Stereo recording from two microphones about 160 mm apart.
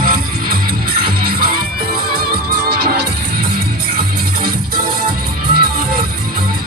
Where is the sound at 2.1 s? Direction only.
80° right.